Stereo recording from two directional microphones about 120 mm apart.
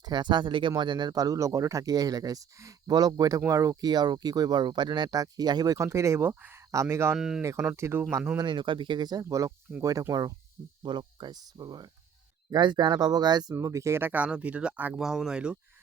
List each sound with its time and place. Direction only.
0.0 s speech: 35° right (ahead or behind); by 7.2 s 20° right (ahead or behind)
7.2 s speech: 5° right (ahead or behind)
7.8 s speech: 20° right (ahead or behind)
8.4 s speech: 40° right (ahead or behind); by 15.5 s 5° right (ahead or behind)